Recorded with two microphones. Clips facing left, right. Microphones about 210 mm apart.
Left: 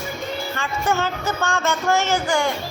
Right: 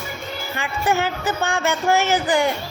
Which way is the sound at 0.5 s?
15° right (ahead or behind).